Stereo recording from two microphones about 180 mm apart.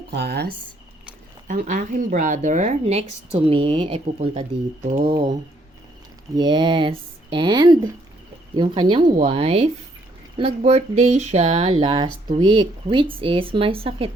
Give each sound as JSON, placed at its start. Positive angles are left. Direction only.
{"t": 0.1, "sound": "speech", "side_deg": -65}
{"t": 1.5, "sound": "speech", "side_deg": -45}